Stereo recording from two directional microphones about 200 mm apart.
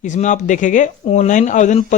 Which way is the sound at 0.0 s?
40° left (ahead or behind).